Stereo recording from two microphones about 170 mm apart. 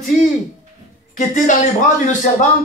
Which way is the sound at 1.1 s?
45° left (ahead or behind).